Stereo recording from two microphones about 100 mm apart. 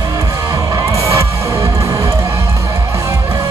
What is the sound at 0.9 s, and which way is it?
Music, 30° right (ahead or behind).